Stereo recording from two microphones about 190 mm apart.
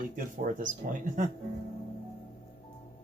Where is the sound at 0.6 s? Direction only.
45° right (ahead or behind).